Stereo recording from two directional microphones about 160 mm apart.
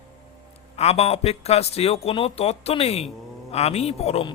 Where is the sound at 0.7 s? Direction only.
40° left (ahead or behind).